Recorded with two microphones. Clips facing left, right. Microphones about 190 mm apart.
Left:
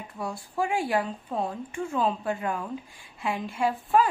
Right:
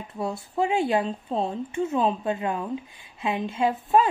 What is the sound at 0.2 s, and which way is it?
A woman's voice, 25° right (ahead or behind).